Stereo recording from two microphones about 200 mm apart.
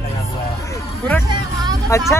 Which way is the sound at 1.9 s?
15° left (ahead or behind).